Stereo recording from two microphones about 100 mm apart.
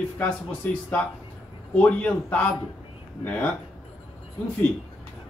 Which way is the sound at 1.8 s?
15° left (ahead or behind).